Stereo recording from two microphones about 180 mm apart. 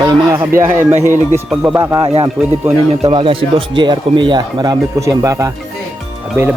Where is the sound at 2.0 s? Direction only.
30° right (ahead or behind).